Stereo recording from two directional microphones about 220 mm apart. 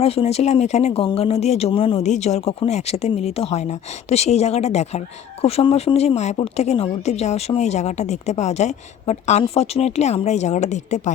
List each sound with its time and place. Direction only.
0.0 s speech: 25° left (ahead or behind)